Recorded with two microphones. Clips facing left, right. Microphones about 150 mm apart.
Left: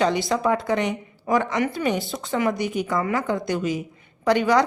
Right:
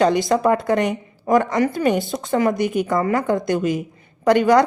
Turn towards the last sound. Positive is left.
turn(degrees=-50)  # may be behind; listen again after turning